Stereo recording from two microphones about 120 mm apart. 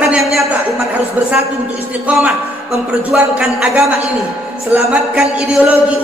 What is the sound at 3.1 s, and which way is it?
A man's voice, 10° right (ahead or behind).